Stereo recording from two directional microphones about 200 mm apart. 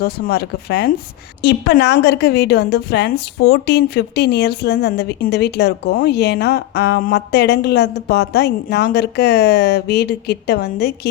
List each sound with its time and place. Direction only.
0.0 s a woman's voice: 55° left (ahead or behind)